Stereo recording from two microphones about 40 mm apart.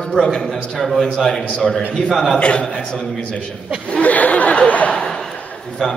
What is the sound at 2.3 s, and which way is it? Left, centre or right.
Speech, left.